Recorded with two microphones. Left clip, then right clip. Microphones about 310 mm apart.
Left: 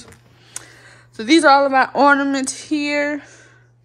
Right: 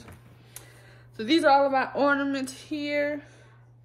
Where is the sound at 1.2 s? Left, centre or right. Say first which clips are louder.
Left 8 dB; left.